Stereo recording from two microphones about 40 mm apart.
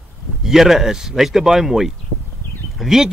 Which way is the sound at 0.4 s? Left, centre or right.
Centre.